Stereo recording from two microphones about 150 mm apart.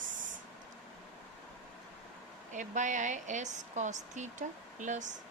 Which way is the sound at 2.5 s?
55° right (ahead or behind).